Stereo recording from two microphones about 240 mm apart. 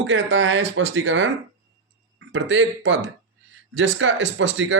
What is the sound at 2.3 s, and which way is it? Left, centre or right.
Speech, right.